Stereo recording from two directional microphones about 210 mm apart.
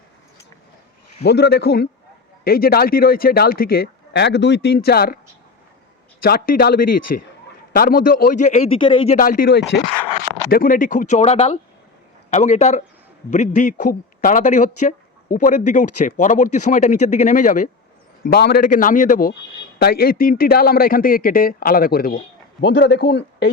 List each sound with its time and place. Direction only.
1.2 s a man's voice: 50° left (ahead or behind)
6.2 s a man's voice: 45° left (ahead or behind)
8.8 s speech: 25° left (ahead or behind)
9.1 s a man's voice: 40° left (ahead or behind)
18.3 s a man's voice: 50° left (ahead or behind)